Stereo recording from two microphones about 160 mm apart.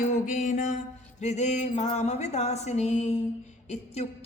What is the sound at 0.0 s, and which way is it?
Music, 50° left (ahead or behind).